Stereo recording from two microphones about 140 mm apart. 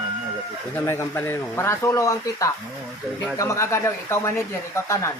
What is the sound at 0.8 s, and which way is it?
Speech, 15° left (ahead or behind).